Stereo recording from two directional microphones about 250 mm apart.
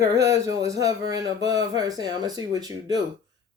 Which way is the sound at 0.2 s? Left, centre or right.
Centre.